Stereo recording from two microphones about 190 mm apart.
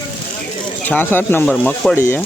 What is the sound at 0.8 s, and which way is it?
Speech, 10° left (ahead or behind).